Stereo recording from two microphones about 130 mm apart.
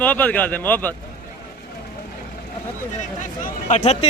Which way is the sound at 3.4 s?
65° left (ahead or behind).